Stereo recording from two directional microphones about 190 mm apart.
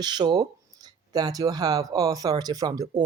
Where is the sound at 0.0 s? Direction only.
20° right (ahead or behind).